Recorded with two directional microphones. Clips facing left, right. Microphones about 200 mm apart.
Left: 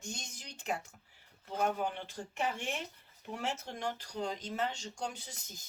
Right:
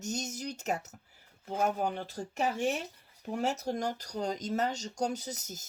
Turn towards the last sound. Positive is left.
turn(degrees=-40)  # may be behind; listen again after turning